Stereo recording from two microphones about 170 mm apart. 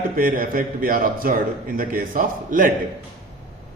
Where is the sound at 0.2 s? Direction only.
55° right (ahead or behind).